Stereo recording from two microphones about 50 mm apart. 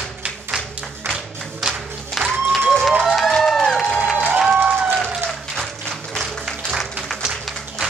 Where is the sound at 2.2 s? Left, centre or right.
Centre.